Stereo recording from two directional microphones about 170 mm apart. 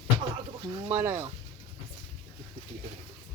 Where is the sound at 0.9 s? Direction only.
10° right (ahead or behind).